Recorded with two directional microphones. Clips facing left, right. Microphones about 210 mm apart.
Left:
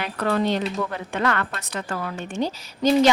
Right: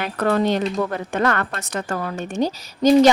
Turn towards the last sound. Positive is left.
turn(degrees=-40)  # may be behind; listen again after turning